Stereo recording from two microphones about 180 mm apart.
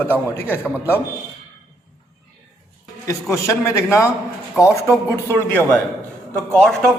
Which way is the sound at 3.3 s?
15° left (ahead or behind).